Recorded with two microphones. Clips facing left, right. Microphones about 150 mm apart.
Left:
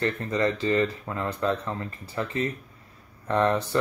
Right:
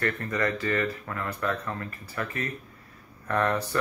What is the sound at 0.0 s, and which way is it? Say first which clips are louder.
Speech: left 3 dB; 25° left (ahead or behind).